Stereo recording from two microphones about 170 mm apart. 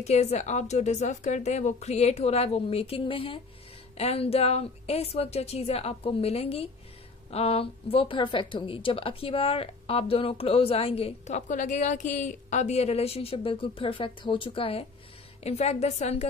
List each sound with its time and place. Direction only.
0.0 s a woman's voice: 40° left (ahead or behind)